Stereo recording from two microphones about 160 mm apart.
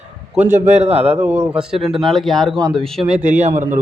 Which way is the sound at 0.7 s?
45° right (ahead or behind).